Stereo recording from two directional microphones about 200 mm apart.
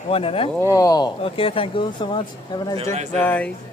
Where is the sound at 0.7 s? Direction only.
15° left (ahead or behind).